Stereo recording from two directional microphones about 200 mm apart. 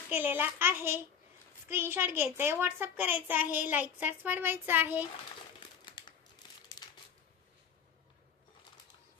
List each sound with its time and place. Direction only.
0.1 s a woman's voice: 10° right (ahead or behind)
5.9 s crumpling: 20° left (ahead or behind)